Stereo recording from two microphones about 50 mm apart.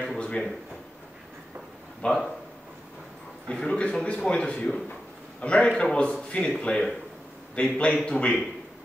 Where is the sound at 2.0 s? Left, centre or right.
Centre.